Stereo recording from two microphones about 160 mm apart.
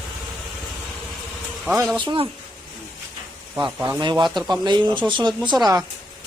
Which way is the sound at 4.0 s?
30° right (ahead or behind).